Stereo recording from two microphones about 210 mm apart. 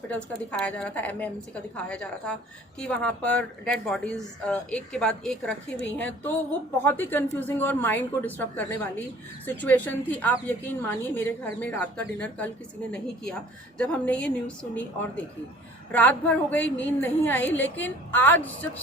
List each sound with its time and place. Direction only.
0.1 s a woman's voice: 5° left (ahead or behind)
13.7 s a woman's voice: 5° left (ahead or behind)